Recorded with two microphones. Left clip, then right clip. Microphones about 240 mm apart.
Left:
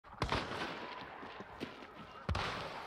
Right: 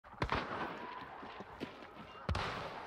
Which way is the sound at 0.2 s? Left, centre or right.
Left.